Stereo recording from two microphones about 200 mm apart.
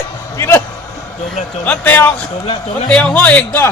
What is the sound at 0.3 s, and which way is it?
Speech, 10° left (ahead or behind).